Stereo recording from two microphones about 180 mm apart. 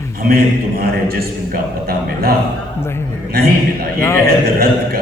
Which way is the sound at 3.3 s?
60° right (ahead or behind).